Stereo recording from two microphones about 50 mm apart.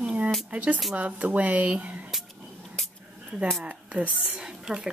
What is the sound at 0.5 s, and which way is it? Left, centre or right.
Speech, right.